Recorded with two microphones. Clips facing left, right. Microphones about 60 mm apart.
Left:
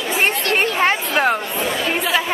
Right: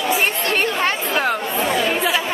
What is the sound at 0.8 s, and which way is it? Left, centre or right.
Chatter, left.